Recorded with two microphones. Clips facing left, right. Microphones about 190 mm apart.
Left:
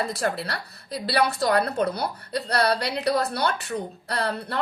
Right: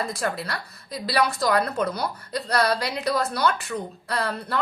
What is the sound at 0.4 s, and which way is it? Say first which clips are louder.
A woman's voice: even; 35° left (ahead or behind).